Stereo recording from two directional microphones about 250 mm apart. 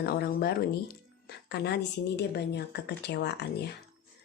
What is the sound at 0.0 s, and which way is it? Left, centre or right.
A woman's voice, left.